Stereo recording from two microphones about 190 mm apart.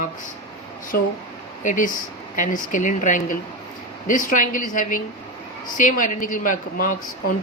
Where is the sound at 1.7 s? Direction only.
45° left (ahead or behind).